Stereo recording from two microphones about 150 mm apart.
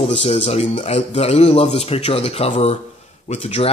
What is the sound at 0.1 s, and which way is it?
Speech, 40° left (ahead or behind).